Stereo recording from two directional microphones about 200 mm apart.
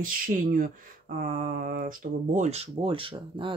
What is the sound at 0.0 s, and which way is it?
Speech, 45° right (ahead or behind).